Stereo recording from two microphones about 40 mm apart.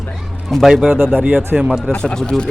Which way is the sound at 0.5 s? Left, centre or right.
Centre.